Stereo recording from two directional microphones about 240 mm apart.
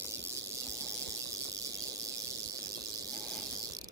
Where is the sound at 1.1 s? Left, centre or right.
Centre.